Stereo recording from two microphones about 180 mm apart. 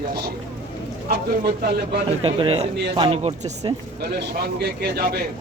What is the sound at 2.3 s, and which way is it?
Speech, 30° right (ahead or behind).